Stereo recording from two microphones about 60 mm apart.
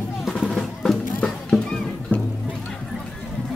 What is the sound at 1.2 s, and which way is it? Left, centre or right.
Music, centre.